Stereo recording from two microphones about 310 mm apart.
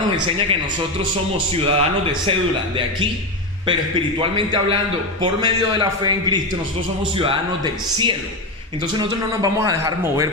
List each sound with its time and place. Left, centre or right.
1.6 s a man's voice: centre
4.2 s a man's voice: centre